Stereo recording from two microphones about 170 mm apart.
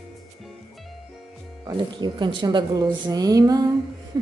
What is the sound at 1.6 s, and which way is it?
A woman's voice, 25° right (ahead or behind).